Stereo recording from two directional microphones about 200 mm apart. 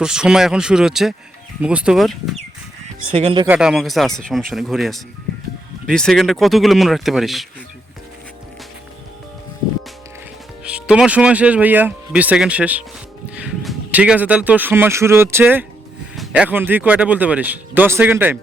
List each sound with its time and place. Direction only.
0.0 s speech: 5° right (ahead or behind)
3.1 s speech: 25° right (ahead or behind)
3.4 s speech: 5° right (ahead or behind)
10.6 s speech: 5° right (ahead or behind)